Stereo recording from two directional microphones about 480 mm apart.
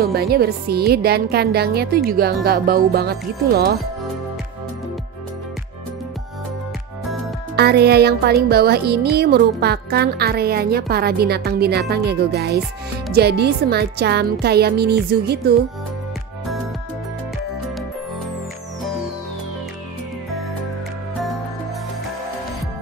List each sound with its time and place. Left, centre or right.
0.0 s speech: centre
7.5 s speech: centre